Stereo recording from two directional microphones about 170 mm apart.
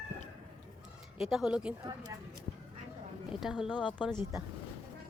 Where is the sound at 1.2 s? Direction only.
Centre (ahead or behind).